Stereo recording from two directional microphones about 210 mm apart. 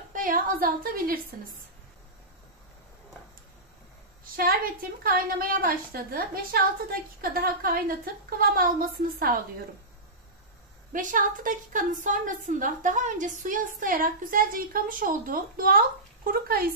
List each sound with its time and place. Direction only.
0.1 s a woman's voice: 40° right (ahead or behind)
4.2 s a woman's voice: 40° right (ahead or behind)
10.9 s a woman's voice: 40° right (ahead or behind)